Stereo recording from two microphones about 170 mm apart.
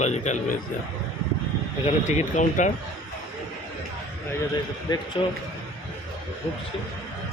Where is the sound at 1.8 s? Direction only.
45° left (ahead or behind).